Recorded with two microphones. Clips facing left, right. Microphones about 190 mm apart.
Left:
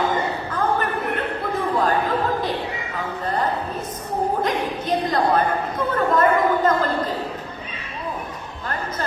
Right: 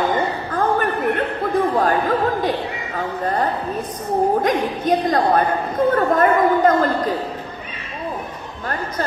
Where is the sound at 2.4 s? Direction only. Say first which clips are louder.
Right 3 dB; 45° right (ahead or behind).